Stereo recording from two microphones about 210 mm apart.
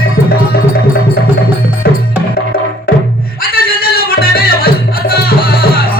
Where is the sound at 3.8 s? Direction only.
45° left (ahead or behind).